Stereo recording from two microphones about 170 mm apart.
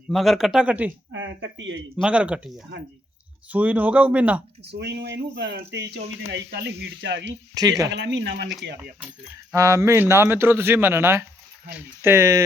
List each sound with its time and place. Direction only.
0.1 s speech: centre (ahead or behind)
1.1 s speech: 90° right
2.0 s speech: 5° right (ahead or behind)
4.7 s speech: 85° right
7.5 s speech: 20° right (ahead or behind)
7.9 s speech: 90° right
8.8 s speech: 10° right (ahead or behind)